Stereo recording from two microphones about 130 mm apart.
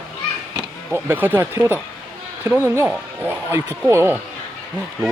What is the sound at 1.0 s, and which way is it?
Speech, 15° right (ahead or behind).